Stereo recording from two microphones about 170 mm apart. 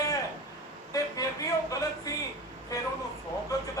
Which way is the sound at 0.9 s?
20° left (ahead or behind).